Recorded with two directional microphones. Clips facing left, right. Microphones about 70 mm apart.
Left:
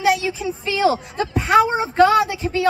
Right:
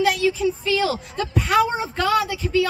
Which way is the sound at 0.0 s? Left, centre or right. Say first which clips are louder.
Even; centre.